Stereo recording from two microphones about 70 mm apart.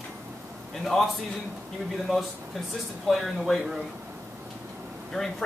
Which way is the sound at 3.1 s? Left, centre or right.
Centre.